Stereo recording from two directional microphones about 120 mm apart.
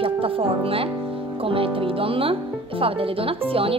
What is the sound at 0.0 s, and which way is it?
Speech, 50° right (ahead or behind).